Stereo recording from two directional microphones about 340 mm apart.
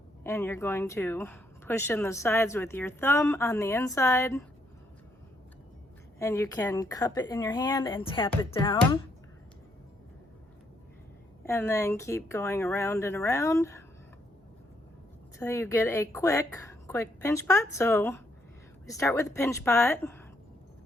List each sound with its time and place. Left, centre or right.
0.3 s speech: centre
6.1 s speech: centre
11.4 s speech: centre
15.4 s speech: centre